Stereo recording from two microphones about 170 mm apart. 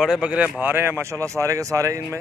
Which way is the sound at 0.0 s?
5° right (ahead or behind).